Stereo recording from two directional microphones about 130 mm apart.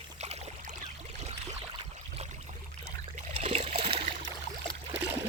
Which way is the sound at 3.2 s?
55° right (ahead or behind).